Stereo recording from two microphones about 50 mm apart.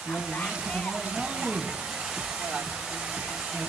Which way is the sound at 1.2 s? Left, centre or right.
Centre.